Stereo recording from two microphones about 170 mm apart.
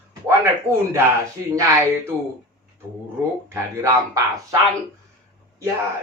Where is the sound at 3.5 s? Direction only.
20° right (ahead or behind).